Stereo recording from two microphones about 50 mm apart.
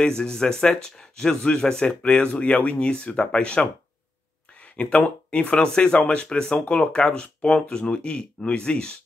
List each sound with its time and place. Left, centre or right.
0.0 s speech: centre
4.8 s speech: left